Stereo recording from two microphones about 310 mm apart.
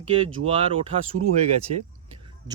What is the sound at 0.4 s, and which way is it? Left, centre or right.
Speech, centre.